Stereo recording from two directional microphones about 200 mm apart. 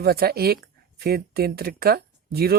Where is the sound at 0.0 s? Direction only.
50° right (ahead or behind).